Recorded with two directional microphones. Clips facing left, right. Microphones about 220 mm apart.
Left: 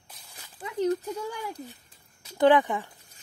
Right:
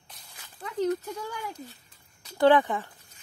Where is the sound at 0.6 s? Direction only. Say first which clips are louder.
Left 1 dB; 10° left (ahead or behind).